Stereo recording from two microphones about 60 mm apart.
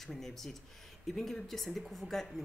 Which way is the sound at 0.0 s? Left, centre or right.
Centre.